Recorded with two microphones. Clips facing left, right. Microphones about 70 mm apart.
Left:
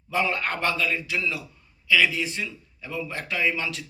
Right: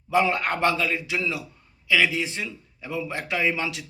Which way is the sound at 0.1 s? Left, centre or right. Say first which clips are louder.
Right 4 dB; right.